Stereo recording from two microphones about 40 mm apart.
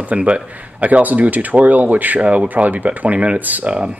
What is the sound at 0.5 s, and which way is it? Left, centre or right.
Speech, right.